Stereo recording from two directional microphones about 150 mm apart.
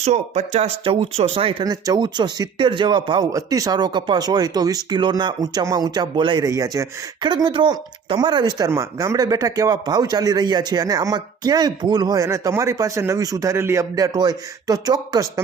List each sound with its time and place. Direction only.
0.0 s speech: 50° right (ahead or behind)
1.6 s speech: 25° right (ahead or behind)